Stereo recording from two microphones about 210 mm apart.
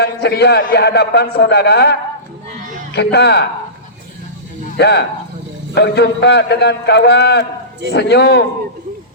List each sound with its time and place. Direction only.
0.0 s a man's voice: 50° left (ahead or behind)
4.8 s a man's voice: 50° left (ahead or behind)